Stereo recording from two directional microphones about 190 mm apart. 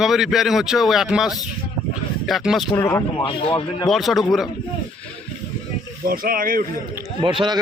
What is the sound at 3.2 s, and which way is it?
Speech, 25° left (ahead or behind).